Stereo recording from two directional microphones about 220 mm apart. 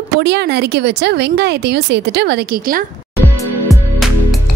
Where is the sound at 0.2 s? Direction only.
50° right (ahead or behind).